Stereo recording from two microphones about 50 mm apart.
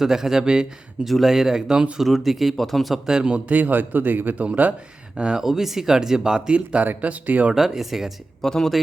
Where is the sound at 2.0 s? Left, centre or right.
Centre.